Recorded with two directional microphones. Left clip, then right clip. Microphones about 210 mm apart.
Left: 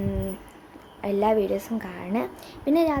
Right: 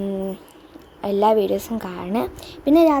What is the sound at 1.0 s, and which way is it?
A child's voice, 15° right (ahead or behind).